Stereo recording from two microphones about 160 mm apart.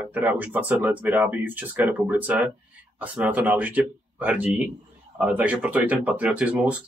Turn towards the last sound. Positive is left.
turn(degrees=-10)  # may be behind; listen again after turning